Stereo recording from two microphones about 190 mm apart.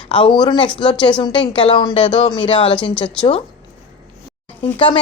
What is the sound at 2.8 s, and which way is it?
Speech, 5° left (ahead or behind).